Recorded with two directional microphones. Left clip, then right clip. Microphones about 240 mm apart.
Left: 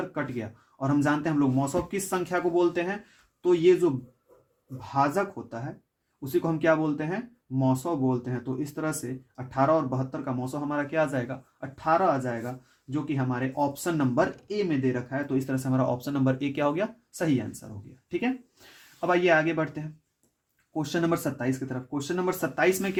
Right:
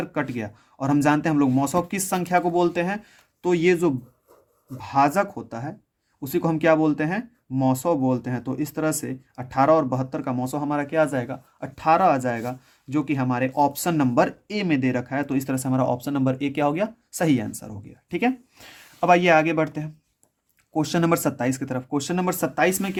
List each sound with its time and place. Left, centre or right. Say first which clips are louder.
0.1 s speech: right 5 dB; right
4.8 s speech: right 6 dB; right
18.9 s speech: right 6 dB; right